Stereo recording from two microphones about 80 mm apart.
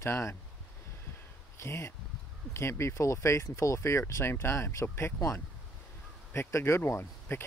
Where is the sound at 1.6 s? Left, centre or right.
Left.